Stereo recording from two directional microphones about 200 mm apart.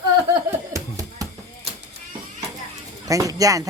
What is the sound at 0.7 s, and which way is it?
Music, 15° right (ahead or behind).